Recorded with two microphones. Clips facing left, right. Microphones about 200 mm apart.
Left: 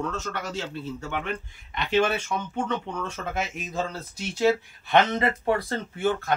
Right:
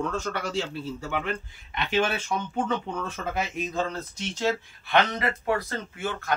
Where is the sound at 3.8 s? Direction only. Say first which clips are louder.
Left 2 dB; 10° left (ahead or behind).